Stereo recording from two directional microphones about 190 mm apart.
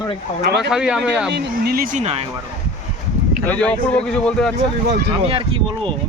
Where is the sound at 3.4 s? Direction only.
5° left (ahead or behind).